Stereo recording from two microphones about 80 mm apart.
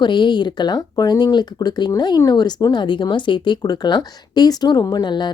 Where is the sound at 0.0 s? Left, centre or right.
Left.